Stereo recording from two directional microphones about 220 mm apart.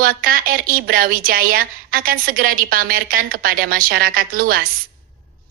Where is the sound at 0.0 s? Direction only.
40° right (ahead or behind).